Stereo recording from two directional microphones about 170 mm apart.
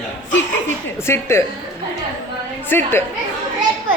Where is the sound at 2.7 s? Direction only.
15° left (ahead or behind).